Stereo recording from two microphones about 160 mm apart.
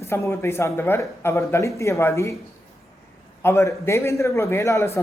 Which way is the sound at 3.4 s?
15° left (ahead or behind).